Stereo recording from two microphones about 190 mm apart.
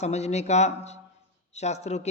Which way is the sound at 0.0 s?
35° left (ahead or behind).